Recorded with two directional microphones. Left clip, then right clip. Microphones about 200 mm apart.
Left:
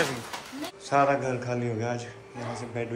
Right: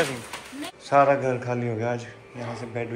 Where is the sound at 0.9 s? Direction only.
10° left (ahead or behind).